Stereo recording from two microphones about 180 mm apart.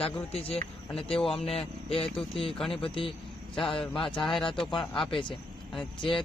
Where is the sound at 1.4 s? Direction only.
30° left (ahead or behind).